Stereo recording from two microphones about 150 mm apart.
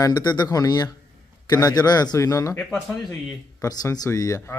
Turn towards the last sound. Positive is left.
turn(degrees=20)  # may be behind; listen again after turning